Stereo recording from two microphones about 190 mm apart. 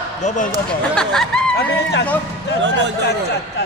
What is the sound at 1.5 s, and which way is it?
Speech, 60° left (ahead or behind).